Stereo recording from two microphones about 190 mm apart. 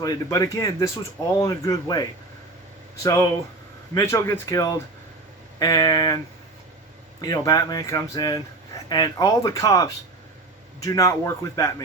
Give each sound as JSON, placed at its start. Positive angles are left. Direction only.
{"t": 0.0, "sound": "speech", "side_deg": 20}
{"t": 7.2, "sound": "speech", "side_deg": 20}